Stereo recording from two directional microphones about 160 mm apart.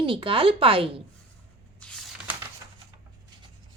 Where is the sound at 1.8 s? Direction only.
10° left (ahead or behind).